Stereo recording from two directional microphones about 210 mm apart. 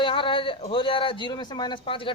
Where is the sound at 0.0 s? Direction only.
25° left (ahead or behind).